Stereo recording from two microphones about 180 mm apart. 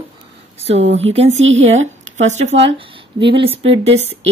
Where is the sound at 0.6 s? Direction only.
35° right (ahead or behind).